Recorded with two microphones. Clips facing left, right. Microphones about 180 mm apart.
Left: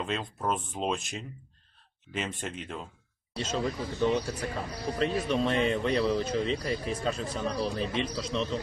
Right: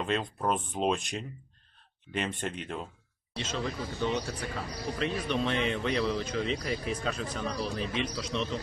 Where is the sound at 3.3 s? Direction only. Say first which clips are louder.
Left 3 dB; 40° left (ahead or behind).